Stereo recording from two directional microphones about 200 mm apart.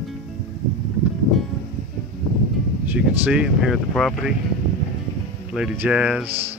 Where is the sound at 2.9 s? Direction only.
5° right (ahead or behind).